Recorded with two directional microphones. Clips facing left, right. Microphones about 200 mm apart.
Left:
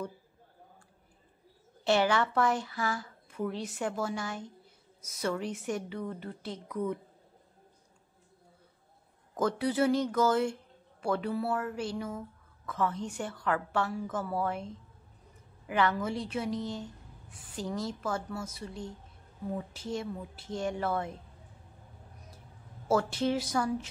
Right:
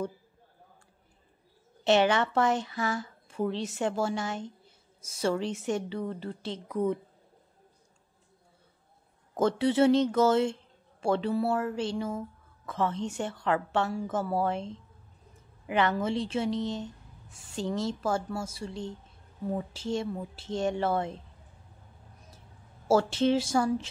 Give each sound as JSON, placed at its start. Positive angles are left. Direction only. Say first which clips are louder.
{"t": 1.9, "sound": "speech", "louder": "right 3 dB", "side_deg": -20}
{"t": 9.4, "sound": "speech", "louder": "right 4 dB", "side_deg": -25}
{"t": 22.8, "sound": "speech", "louder": "right 4 dB", "side_deg": -25}